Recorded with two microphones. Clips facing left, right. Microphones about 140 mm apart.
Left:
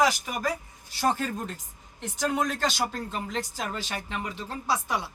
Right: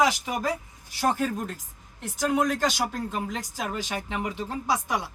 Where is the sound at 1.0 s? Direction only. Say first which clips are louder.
Right 1 dB; 10° right (ahead or behind).